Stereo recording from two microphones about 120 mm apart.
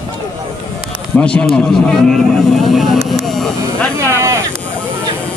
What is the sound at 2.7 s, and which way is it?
Speech, centre (ahead or behind).